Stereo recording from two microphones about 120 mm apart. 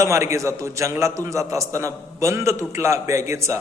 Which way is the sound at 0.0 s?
25° right (ahead or behind).